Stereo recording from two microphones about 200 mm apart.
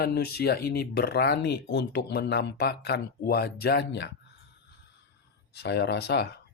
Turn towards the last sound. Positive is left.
turn(degrees=55)  # may be behind; listen again after turning